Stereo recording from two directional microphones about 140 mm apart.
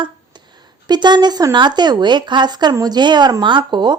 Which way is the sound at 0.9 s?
30° right (ahead or behind).